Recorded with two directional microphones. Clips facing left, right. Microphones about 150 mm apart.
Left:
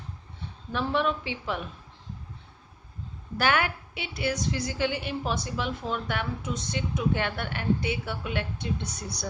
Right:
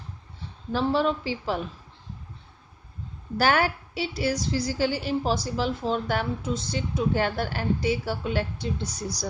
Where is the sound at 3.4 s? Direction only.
35° right (ahead or behind).